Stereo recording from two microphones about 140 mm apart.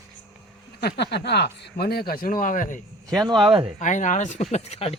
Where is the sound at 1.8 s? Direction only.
90° left; by 2.8 s 70° left (ahead or behind).